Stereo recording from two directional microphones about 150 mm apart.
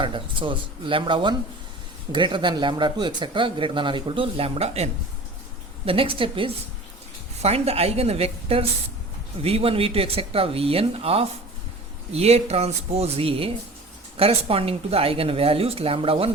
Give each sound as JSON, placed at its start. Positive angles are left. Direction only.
{"t": 0.0, "sound": "speech", "side_deg": -35}